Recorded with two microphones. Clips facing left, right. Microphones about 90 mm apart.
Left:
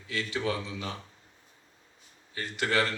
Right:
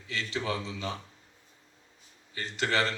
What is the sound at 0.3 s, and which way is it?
Speech, 25° right (ahead or behind).